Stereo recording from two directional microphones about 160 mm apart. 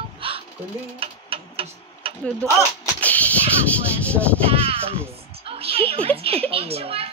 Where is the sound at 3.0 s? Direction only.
10° left (ahead or behind).